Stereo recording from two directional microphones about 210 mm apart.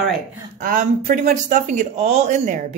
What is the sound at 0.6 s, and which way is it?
Speech, 40° right (ahead or behind).